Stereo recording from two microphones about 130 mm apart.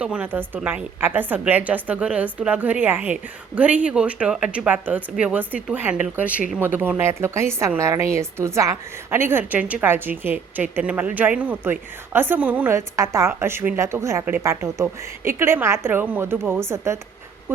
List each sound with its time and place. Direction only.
0.0 s a woman's voice: 10° right (ahead or behind)